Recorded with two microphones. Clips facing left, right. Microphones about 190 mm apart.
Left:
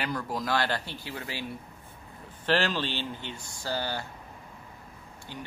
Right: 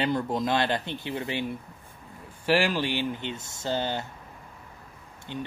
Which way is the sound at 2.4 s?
10° right (ahead or behind).